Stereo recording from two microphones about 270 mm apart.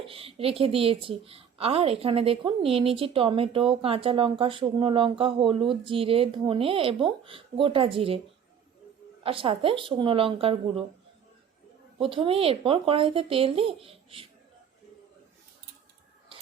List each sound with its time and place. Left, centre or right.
0.0 s a woman's voice: right
9.2 s a woman's voice: centre
11.9 s a woman's voice: centre